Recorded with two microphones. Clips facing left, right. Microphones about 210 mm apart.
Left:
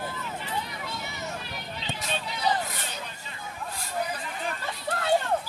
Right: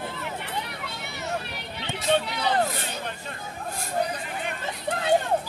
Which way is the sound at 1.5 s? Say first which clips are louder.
Right 2 dB; 65° right (ahead or behind).